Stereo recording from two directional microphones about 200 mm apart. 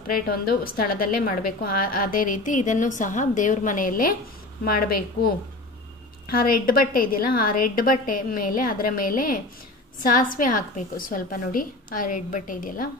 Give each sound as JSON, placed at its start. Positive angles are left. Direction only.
{"t": 0.1, "sound": "a woman's voice", "side_deg": 45}
{"t": 6.3, "sound": "a woman's voice", "side_deg": 45}